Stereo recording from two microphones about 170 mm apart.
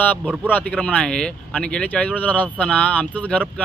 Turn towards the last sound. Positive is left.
turn(degrees=10)  # may be behind; listen again after turning